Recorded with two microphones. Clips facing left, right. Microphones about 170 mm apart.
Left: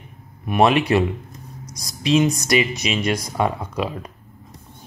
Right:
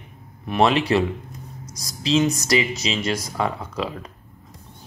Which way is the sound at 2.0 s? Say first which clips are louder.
Left 2 dB; 15° left (ahead or behind).